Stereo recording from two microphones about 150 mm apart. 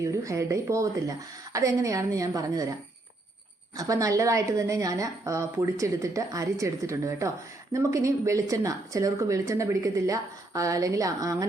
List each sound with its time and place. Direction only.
0.0 s speech: 20° right (ahead or behind)
3.8 s speech: 20° right (ahead or behind)